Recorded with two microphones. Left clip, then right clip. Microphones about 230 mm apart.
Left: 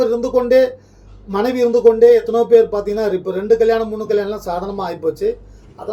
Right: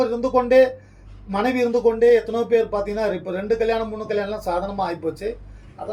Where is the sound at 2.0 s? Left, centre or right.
Centre.